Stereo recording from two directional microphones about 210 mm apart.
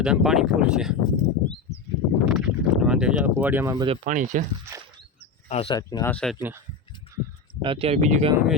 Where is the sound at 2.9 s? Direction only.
5° right (ahead or behind).